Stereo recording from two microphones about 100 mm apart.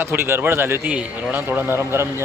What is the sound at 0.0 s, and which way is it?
A man's voice, 25° right (ahead or behind).